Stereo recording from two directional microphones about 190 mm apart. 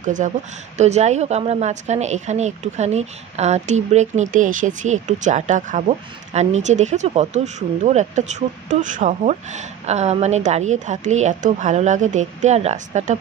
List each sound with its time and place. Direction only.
0.0 s a woman's voice: 40° right (ahead or behind)